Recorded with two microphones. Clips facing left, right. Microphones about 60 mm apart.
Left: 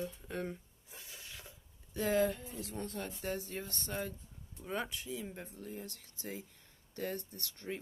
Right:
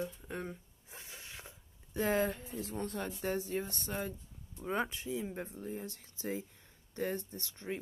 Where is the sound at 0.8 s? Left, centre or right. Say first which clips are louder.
Right 2 dB; right.